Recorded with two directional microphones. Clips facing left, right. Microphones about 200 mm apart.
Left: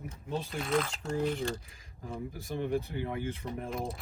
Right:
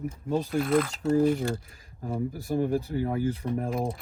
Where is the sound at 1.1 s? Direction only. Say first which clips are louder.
Right 8 dB; 50° right (ahead or behind).